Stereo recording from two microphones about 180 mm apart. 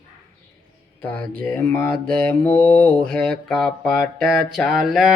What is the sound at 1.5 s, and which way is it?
Mantra, 10° left (ahead or behind).